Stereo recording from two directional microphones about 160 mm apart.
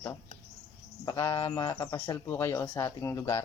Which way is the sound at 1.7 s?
20° left (ahead or behind).